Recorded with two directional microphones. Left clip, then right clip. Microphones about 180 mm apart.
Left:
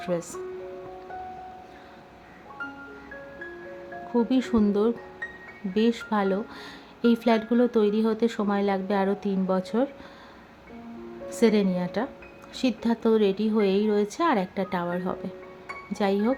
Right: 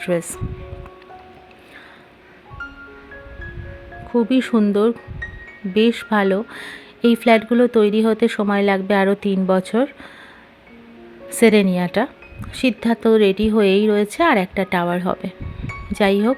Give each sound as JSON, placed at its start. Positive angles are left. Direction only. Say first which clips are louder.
{"t": 0.0, "sound": "speech", "louder": "right 8 dB", "side_deg": -25}
{"t": 4.1, "sound": "speech", "louder": "right 7 dB", "side_deg": -20}
{"t": 11.3, "sound": "speech", "louder": "right 8 dB", "side_deg": -25}